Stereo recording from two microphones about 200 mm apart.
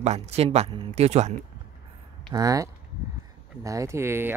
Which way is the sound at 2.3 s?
15° right (ahead or behind).